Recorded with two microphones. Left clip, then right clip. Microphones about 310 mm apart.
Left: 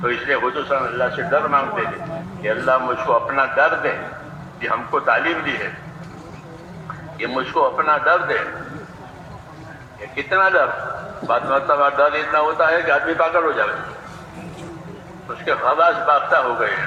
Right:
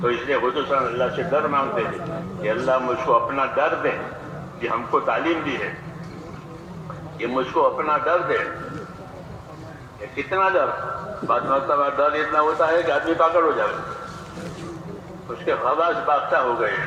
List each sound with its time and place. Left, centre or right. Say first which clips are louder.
0.1 s a man's voice: left 2 dB; left
7.3 s a man's voice: left 1 dB; left
10.2 s a man's voice: left 4 dB; left
15.4 s a man's voice: left 4 dB; left